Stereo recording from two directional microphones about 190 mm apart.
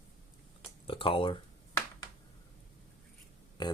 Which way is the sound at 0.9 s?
30° left (ahead or behind).